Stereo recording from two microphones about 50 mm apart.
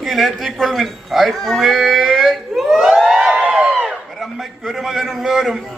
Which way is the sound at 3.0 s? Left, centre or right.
Centre.